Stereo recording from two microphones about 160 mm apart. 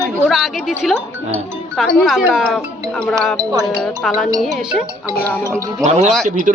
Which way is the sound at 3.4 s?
25° right (ahead or behind).